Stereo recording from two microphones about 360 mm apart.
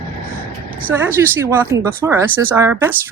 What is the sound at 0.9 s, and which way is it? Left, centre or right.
A woman's voice, centre.